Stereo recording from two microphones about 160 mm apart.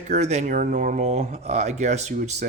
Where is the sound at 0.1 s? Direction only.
45° right (ahead or behind).